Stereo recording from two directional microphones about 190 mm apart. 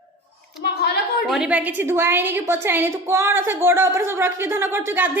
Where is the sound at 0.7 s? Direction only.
60° left (ahead or behind).